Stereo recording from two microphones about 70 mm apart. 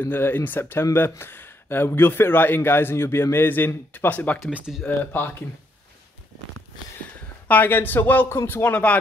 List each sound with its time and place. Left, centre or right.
0.0 s speech: left
4.5 s speech: centre
4.8 s a man's voice: left
7.4 s a man's voice: left
8.6 s a man's voice: left